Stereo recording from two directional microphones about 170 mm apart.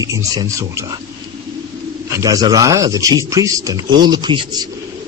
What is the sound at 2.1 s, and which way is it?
Speech, 20° right (ahead or behind).